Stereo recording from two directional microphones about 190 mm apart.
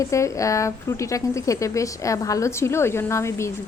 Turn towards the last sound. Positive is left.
turn(degrees=15)  # may be behind; listen again after turning